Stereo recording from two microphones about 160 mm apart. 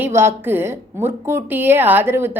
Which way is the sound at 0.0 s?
15° right (ahead or behind).